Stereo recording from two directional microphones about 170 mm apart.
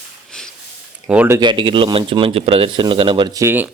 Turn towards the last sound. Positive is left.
turn(degrees=-10)  # may be behind; listen again after turning